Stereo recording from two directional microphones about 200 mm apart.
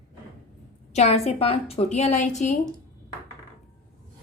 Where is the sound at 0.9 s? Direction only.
35° left (ahead or behind).